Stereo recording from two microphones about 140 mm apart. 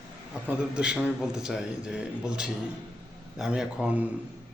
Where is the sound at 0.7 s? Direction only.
10° right (ahead or behind).